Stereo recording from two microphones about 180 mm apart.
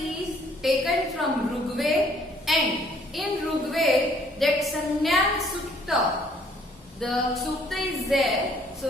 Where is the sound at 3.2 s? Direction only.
Centre (ahead or behind).